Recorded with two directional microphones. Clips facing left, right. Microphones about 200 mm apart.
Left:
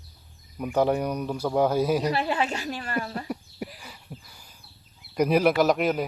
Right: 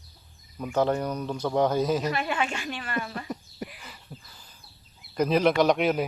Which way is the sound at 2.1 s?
35° left (ahead or behind).